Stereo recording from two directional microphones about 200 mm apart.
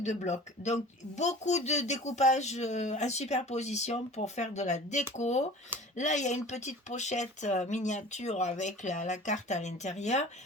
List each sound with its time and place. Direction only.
0.0 s speech: 35° left (ahead or behind)